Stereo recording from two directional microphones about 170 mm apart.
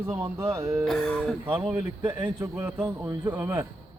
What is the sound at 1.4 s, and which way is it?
Speech, 10° right (ahead or behind).